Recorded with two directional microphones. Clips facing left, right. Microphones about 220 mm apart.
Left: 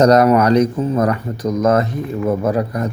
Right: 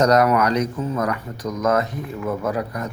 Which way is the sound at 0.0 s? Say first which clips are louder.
Left 5 dB; 30° left (ahead or behind).